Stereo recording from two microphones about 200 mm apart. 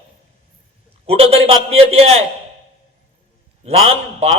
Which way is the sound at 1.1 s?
30° right (ahead or behind).